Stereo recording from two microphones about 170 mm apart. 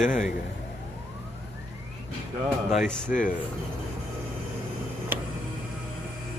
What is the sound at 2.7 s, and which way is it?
Speech, centre (ahead or behind).